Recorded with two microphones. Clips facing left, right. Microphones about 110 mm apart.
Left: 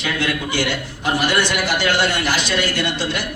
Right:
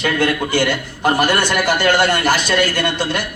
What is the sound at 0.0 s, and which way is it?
A man's voice, 50° right (ahead or behind).